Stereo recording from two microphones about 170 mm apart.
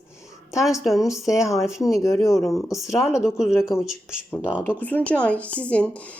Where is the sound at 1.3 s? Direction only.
20° left (ahead or behind).